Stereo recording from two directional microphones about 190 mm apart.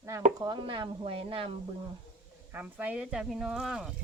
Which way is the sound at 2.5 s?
10° right (ahead or behind).